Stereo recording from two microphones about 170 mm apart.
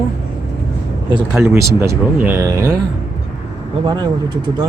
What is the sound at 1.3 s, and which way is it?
Speech, 15° right (ahead or behind).